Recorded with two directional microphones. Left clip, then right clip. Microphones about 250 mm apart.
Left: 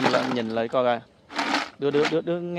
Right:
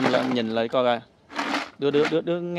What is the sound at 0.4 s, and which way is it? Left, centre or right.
Speech, centre.